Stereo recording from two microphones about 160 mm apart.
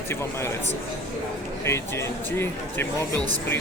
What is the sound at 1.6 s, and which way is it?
Speech, 15° left (ahead or behind).